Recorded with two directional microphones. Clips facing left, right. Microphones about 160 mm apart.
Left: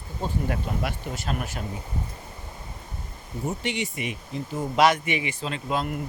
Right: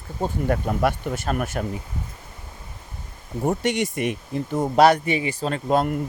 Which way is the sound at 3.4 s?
50° right (ahead or behind).